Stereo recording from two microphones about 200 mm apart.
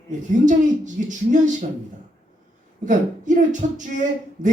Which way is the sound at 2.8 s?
40° right (ahead or behind).